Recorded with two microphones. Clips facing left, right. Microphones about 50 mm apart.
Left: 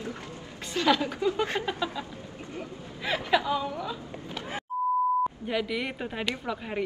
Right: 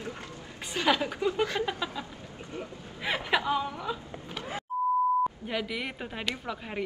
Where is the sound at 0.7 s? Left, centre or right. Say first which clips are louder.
Left 2 dB; centre.